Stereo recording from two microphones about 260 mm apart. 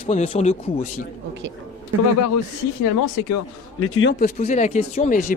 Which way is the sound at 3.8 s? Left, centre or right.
Left.